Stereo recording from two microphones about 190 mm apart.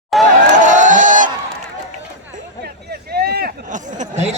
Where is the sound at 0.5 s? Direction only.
40° right (ahead or behind).